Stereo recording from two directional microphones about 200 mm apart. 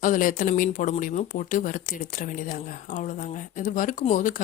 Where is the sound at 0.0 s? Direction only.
40° left (ahead or behind).